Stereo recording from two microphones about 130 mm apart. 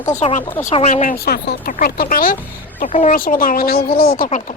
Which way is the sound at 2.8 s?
60° left (ahead or behind).